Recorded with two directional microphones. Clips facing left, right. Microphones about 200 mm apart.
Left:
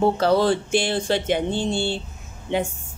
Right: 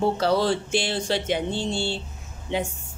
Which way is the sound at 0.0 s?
50° left (ahead or behind).